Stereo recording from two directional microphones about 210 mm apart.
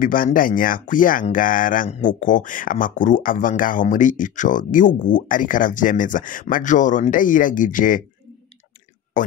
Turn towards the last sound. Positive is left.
turn(degrees=40)  # may be behind; listen again after turning